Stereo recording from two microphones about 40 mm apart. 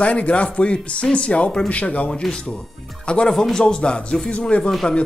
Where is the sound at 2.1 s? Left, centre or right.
Left.